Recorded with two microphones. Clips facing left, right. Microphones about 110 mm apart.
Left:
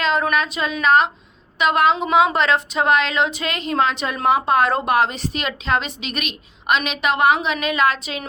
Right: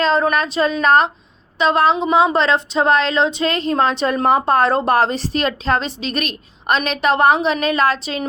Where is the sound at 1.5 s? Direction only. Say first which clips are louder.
Right 2 dB; 30° right (ahead or behind).